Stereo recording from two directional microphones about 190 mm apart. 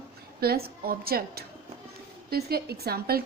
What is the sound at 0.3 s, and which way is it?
A woman's voice, 55° right (ahead or behind).